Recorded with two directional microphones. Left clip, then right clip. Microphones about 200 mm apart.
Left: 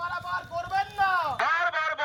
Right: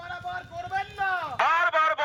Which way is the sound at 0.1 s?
5° right (ahead or behind).